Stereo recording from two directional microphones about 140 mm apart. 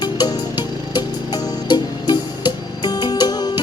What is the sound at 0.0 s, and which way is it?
Music, 30° left (ahead or behind).